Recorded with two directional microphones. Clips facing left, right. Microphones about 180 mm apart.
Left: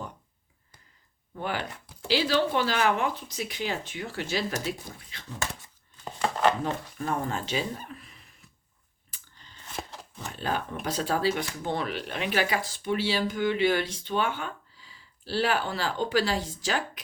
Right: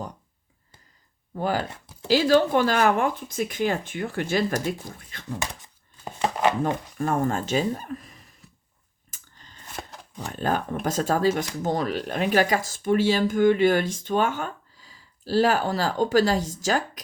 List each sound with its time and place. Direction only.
1.4 s speech: 40° right (ahead or behind)
5.4 s speech: 15° right (ahead or behind)
6.2 s chopping: 10° right (ahead or behind)
7.0 s speech: 45° right (ahead or behind)
9.0 s a sound: 45° right (ahead or behind)
9.6 s chopping: centre (ahead or behind)
10.2 s speech: 45° right (ahead or behind)